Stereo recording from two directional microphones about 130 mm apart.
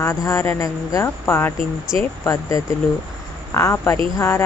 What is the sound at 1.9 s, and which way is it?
Speech, 5° right (ahead or behind).